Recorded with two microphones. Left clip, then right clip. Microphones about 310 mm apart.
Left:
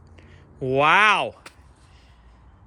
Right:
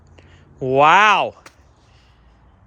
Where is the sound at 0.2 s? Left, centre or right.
Centre.